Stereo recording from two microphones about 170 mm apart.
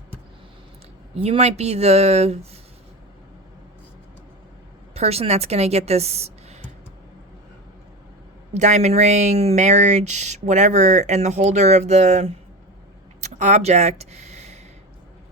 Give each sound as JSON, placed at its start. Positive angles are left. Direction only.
{"t": 1.1, "sound": "speech", "side_deg": -35}
{"t": 4.9, "sound": "speech", "side_deg": -35}
{"t": 8.5, "sound": "speech", "side_deg": -45}